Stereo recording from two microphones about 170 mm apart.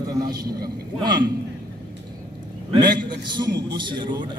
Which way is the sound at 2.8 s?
25° right (ahead or behind).